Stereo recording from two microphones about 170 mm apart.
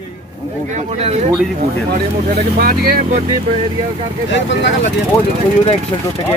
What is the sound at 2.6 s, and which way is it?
Speech, 60° right (ahead or behind).